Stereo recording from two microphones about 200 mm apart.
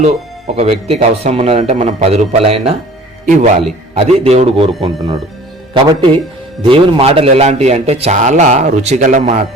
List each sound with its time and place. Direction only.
0.5 s a man's voice: 30° right (ahead or behind)
4.8 s a man's voice: 20° right (ahead or behind); by 9.5 s 35° right (ahead or behind)